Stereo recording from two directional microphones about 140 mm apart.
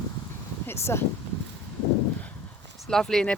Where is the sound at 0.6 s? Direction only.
20° left (ahead or behind).